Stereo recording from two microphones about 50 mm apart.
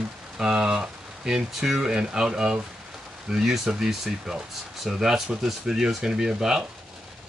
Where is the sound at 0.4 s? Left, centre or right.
Centre.